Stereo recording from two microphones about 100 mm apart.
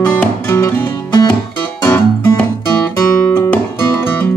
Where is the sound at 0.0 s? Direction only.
10° left (ahead or behind).